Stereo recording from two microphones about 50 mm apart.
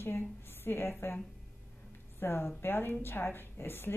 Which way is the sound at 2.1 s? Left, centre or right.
Left.